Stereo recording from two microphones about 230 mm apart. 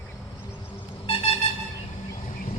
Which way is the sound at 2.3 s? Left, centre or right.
Left.